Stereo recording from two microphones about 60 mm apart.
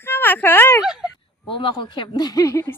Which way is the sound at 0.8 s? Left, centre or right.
Centre.